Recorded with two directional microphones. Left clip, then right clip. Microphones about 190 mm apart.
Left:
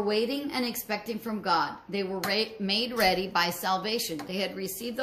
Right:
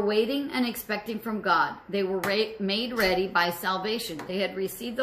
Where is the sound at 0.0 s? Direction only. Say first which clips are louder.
Right 3 dB; 25° left (ahead or behind).